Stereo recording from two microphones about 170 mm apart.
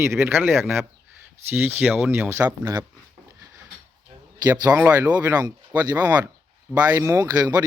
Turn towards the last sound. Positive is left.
turn(degrees=-20)  # may be behind; listen again after turning